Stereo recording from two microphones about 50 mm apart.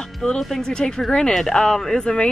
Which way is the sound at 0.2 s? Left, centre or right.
Centre.